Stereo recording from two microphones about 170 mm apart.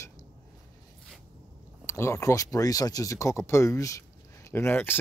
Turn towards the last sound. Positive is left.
turn(degrees=10)  # may be behind; listen again after turning